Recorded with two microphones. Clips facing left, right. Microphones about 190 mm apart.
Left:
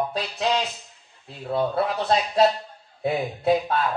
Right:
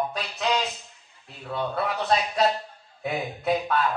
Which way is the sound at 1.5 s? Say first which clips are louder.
Left 4 dB; 30° left (ahead or behind).